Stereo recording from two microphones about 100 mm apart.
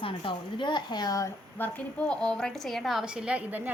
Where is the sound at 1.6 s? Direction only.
15° left (ahead or behind).